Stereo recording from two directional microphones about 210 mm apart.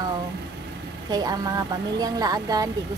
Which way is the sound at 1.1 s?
20° right (ahead or behind).